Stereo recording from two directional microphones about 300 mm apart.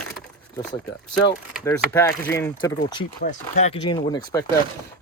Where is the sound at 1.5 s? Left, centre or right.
Centre.